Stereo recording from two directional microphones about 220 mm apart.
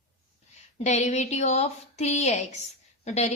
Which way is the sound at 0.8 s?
30° left (ahead or behind).